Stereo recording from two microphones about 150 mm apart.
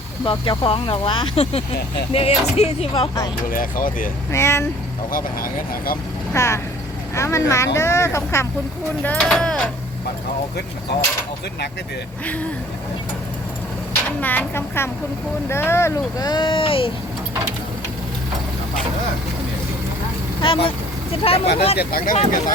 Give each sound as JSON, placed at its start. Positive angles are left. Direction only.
{"t": 0.3, "sound": "speech", "side_deg": 35}
{"t": 3.5, "sound": "speech", "side_deg": 65}
{"t": 4.3, "sound": "speech", "side_deg": 20}
{"t": 5.1, "sound": "speech", "side_deg": 75}
{"t": 6.3, "sound": "speech", "side_deg": 20}
{"t": 9.0, "sound": "speech", "side_deg": 5}
{"t": 12.2, "sound": "speech", "side_deg": 10}
{"t": 14.2, "sound": "speech", "side_deg": 10}
{"t": 20.4, "sound": "speech", "side_deg": 35}
{"t": 21.8, "sound": "speech", "side_deg": 80}
{"t": 22.1, "sound": "speech", "side_deg": 60}